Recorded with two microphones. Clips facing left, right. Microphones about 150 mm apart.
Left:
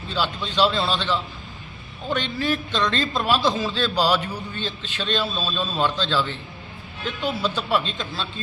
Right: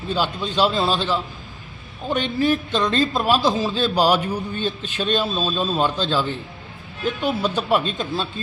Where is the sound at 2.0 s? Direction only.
10° right (ahead or behind).